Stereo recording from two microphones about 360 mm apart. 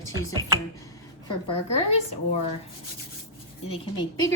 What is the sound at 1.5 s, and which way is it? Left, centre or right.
Speech, centre.